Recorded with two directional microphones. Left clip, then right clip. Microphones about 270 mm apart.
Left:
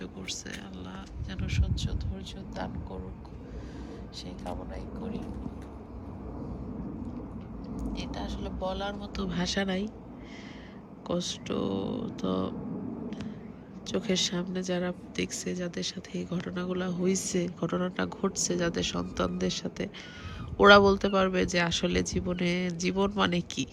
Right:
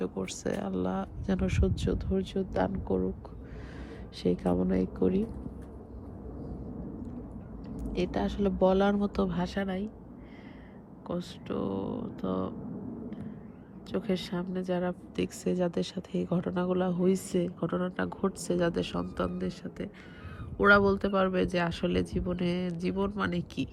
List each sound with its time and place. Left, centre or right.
0.0 s speech: centre
2.9 s speech: right
4.2 s speech: right
7.8 s speech: right
9.2 s speech: centre
11.1 s speech: centre
13.8 s a man's voice: centre